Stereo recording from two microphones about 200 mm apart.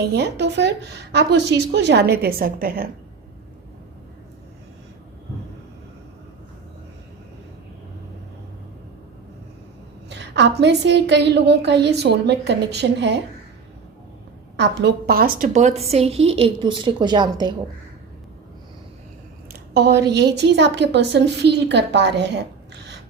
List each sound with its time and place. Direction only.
0.0 s a woman's voice: 55° right (ahead or behind)
10.1 s a woman's voice: 60° right (ahead or behind)
14.5 s a woman's voice: 60° right (ahead or behind); by 17.5 s 20° right (ahead or behind)
19.7 s a woman's voice: 55° right (ahead or behind)